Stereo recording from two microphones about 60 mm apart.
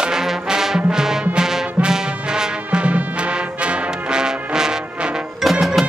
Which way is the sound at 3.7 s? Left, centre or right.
Centre.